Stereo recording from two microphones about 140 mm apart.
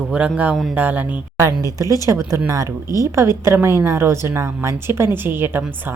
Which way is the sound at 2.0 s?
20° right (ahead or behind).